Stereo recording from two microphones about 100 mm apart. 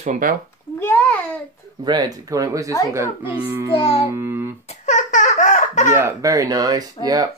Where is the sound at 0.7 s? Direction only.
20° left (ahead or behind).